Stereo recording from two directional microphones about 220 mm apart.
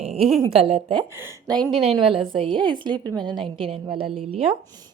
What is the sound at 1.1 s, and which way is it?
Speech, 10° right (ahead or behind).